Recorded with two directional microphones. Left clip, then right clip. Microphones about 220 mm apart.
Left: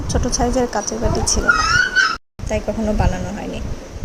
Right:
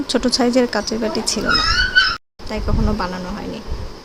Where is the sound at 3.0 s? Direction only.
Centre (ahead or behind).